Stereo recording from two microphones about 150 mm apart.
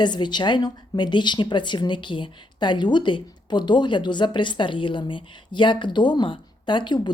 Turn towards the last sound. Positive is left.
turn(degrees=30)  # may be behind; listen again after turning